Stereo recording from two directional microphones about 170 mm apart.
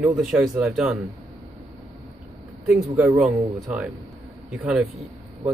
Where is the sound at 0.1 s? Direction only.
5° right (ahead or behind).